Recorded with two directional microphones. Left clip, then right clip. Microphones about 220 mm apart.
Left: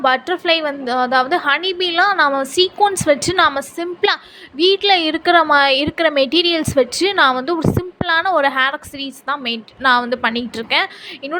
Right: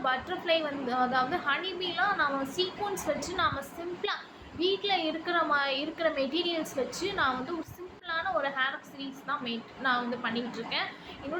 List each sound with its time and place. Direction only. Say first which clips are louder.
0.0 s a woman's voice: left 14 dB; 50° left (ahead or behind)